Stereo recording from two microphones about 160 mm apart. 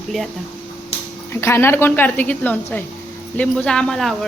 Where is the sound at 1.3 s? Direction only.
15° left (ahead or behind).